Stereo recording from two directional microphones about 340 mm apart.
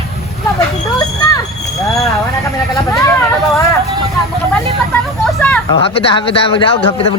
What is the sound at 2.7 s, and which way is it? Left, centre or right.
Speech, centre.